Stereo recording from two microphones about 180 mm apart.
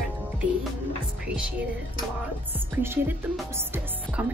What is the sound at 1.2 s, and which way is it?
Speech, 5° right (ahead or behind).